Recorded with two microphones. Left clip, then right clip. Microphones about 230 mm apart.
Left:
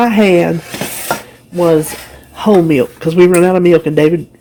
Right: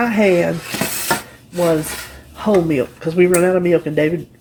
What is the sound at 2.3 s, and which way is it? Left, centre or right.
Speech, left.